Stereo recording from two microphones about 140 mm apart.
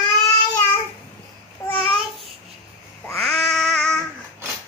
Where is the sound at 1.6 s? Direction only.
25° left (ahead or behind).